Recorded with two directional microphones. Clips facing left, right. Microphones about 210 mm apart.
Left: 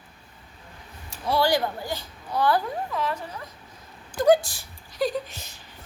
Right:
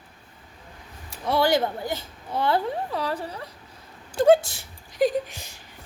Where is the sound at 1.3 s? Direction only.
20° right (ahead or behind).